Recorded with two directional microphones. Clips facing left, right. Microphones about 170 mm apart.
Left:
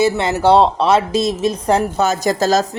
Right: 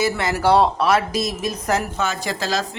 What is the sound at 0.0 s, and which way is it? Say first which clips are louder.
Speech: left 5 dB; 25° left (ahead or behind).